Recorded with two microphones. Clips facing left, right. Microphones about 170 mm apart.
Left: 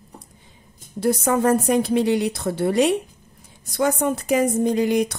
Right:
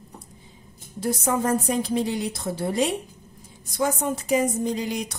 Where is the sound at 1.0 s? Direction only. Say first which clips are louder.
Left 5 dB; 65° left (ahead or behind).